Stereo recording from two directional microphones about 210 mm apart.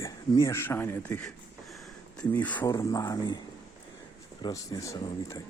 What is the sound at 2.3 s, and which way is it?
Speech, 10° left (ahead or behind).